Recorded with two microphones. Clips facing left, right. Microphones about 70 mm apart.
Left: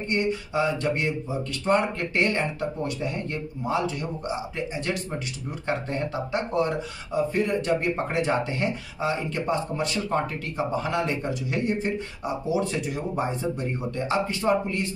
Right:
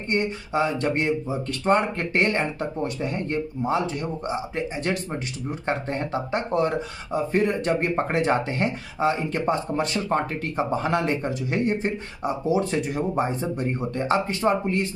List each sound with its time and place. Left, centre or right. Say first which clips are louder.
0.1 s speech: right 2 dB; right
5.5 s speech: right 2 dB; right